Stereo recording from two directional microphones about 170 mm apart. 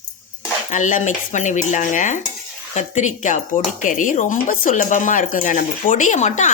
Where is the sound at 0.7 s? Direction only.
45° left (ahead or behind).